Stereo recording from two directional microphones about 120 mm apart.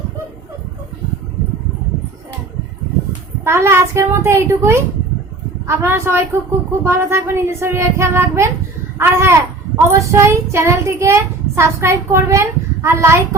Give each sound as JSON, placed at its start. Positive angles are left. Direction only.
{"t": 3.4, "sound": "a child's voice", "side_deg": -20}